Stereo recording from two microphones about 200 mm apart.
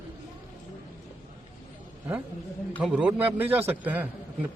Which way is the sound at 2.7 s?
Centre (ahead or behind).